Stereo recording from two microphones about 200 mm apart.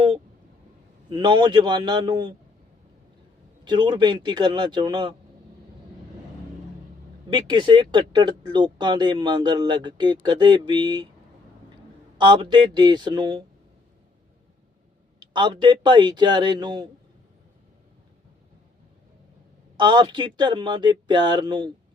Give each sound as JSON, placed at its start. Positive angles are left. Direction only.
{"t": 1.1, "sound": "speech", "side_deg": -25}
{"t": 3.6, "sound": "speech", "side_deg": -20}
{"t": 7.3, "sound": "speech", "side_deg": -25}
{"t": 12.1, "sound": "speech", "side_deg": -25}
{"t": 15.2, "sound": "speech", "side_deg": -20}
{"t": 19.7, "sound": "speech", "side_deg": -20}